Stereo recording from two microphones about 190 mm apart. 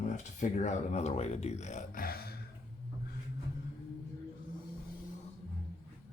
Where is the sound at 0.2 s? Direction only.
40° left (ahead or behind).